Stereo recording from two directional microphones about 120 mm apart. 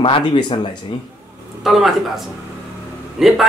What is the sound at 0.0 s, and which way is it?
Speech, 40° left (ahead or behind).